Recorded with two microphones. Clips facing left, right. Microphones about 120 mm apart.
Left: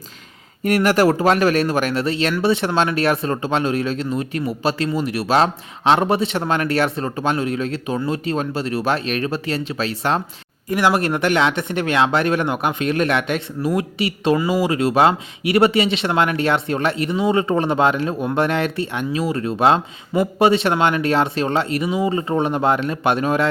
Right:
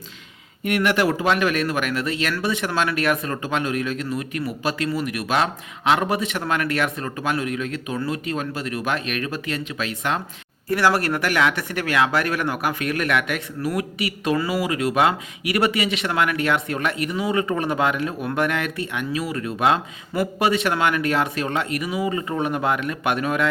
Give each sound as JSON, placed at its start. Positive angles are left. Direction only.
{"t": 0.6, "sound": "speech", "side_deg": 40}
{"t": 10.7, "sound": "speech", "side_deg": 20}